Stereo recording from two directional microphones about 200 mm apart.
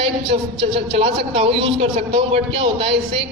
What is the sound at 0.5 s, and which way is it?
A man's voice, 30° right (ahead or behind).